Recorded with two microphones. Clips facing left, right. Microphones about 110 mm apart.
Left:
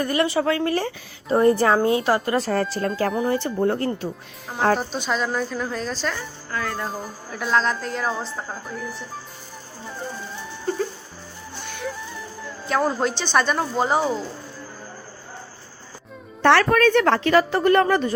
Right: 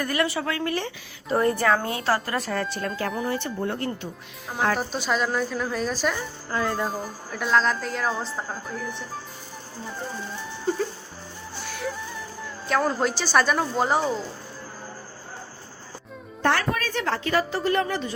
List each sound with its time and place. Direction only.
0.0 s speech: 25° left (ahead or behind)
1.3 s a woman's voice: 25° left (ahead or behind)
2.5 s speech: 40° left (ahead or behind)
4.8 s speech: 5° right (ahead or behind)
11.6 s music: centre (ahead or behind)
16.4 s a woman's voice: 80° left; by 18.1 s 55° left (ahead or behind)